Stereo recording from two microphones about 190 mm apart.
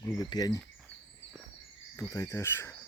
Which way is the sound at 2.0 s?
15° left (ahead or behind).